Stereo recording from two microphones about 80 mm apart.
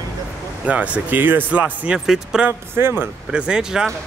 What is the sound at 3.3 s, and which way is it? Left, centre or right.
Speech, centre.